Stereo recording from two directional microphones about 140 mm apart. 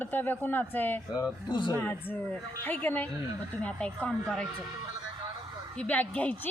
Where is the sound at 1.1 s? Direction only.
30° left (ahead or behind).